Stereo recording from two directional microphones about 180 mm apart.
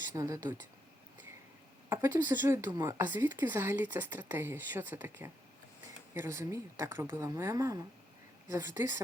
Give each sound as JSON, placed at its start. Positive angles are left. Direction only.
{"t": 0.1, "sound": "speech", "side_deg": -15}
{"t": 1.9, "sound": "speech", "side_deg": -15}